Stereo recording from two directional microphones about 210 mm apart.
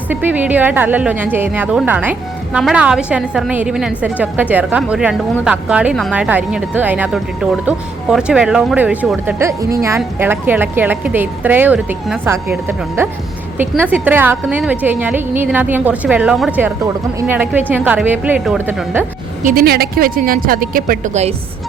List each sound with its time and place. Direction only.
0.1 s a woman's voice: 10° right (ahead or behind)
19.4 s a woman's voice: 40° right (ahead or behind)